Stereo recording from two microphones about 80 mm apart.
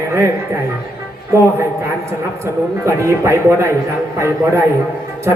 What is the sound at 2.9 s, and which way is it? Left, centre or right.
A man's voice, right.